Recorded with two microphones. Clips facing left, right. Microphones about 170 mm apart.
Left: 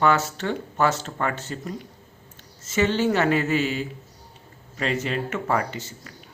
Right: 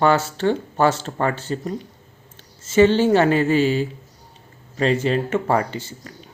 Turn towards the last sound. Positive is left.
turn(degrees=-30)  # may be behind; listen again after turning